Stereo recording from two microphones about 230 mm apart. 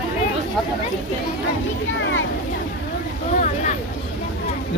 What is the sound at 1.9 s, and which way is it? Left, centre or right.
Speech, left.